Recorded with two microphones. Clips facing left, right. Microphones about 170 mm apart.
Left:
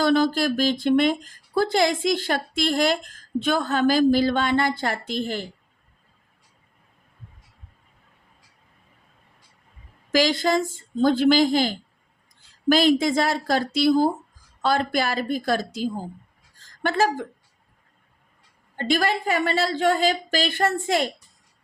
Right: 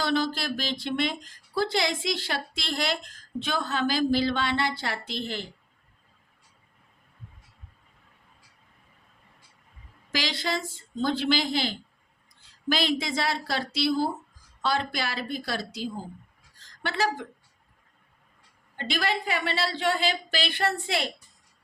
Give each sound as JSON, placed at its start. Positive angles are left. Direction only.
{"t": 0.0, "sound": "speech", "side_deg": 50}
{"t": 10.1, "sound": "speech", "side_deg": 45}
{"t": 16.6, "sound": "a sound", "side_deg": 50}
{"t": 18.8, "sound": "speech", "side_deg": 45}